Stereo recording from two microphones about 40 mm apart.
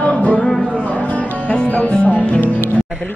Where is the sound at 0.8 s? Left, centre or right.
Left.